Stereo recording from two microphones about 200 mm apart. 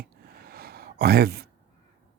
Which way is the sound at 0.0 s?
50° right (ahead or behind).